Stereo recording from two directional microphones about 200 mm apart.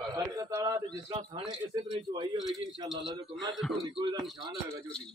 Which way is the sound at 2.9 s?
Centre (ahead or behind).